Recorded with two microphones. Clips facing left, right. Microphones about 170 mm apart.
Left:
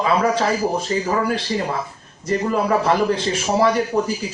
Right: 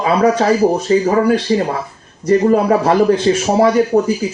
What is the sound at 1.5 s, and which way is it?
Speech, 30° right (ahead or behind).